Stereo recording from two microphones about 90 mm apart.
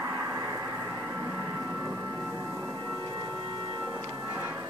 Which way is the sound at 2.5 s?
30° right (ahead or behind).